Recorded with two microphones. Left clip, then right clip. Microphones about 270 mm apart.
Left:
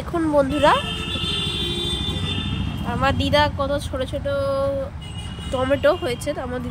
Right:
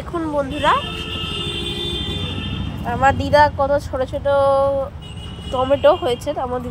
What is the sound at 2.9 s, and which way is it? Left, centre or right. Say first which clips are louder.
Speech: right 5 dB; centre.